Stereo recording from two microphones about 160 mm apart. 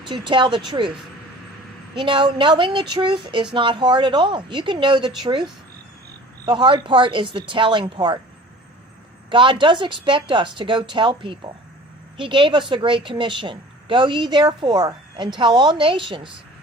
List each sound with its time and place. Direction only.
0.0 s speech: 30° right (ahead or behind)
2.0 s a woman's voice: 30° right (ahead or behind)
9.3 s a woman's voice: 30° right (ahead or behind)